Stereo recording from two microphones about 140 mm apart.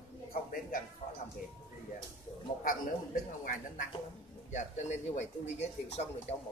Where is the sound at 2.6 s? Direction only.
70° left (ahead or behind).